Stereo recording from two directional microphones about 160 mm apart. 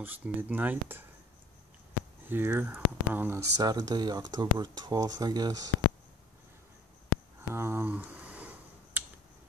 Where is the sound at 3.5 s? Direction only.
25° right (ahead or behind).